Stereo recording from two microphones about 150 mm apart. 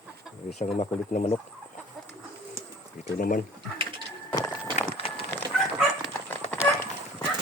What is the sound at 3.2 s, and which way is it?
Speech, 70° left (ahead or behind).